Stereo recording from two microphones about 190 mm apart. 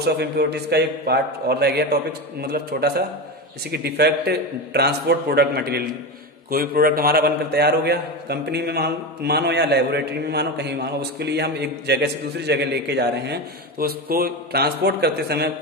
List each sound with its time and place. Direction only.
0.0 s a man's voice: 60° right (ahead or behind)